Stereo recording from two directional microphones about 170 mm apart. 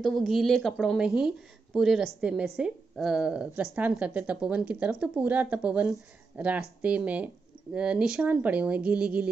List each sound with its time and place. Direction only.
0.0 s speech: centre (ahead or behind)